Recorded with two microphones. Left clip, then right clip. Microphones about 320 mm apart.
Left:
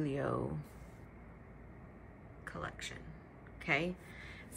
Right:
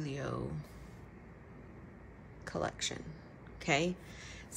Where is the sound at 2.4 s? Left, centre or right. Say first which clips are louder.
Right 7 dB; centre.